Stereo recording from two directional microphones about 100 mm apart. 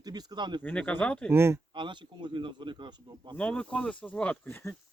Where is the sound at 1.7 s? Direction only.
50° right (ahead or behind).